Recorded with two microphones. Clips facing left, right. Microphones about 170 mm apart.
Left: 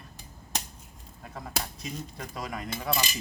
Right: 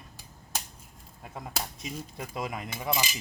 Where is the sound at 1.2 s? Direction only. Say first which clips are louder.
Left 1 dB; 10° right (ahead or behind).